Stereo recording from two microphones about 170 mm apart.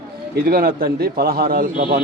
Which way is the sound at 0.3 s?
60° right (ahead or behind).